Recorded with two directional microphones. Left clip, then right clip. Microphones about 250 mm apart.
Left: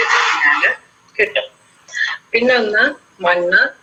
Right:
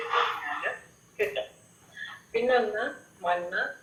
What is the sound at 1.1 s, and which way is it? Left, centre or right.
A woman's voice, left.